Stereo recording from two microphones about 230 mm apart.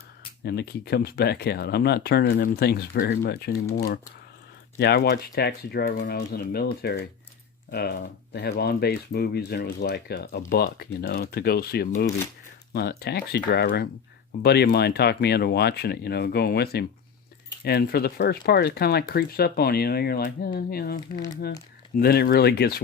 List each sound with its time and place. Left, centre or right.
0.4 s speech: left